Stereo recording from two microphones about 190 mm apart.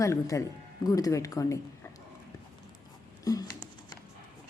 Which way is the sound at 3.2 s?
20° left (ahead or behind).